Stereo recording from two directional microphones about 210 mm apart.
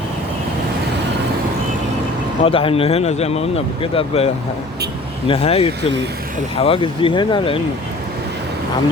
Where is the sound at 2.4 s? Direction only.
25° left (ahead or behind).